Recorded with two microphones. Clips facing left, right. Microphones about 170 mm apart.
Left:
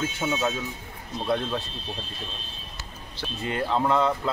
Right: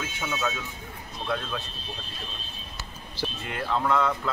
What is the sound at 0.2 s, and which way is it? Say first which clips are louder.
A man's voice: left 2 dB; 25° left (ahead or behind).